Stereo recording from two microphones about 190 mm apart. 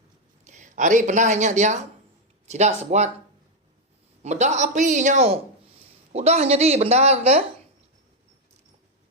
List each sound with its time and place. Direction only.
0.4 s speech: 40° right (ahead or behind)
4.2 s speech: 35° right (ahead or behind)